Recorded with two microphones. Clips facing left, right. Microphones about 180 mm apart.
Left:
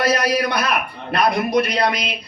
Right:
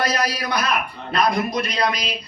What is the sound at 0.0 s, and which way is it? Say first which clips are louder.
A man's voice: left 5 dB; 60° left (ahead or behind).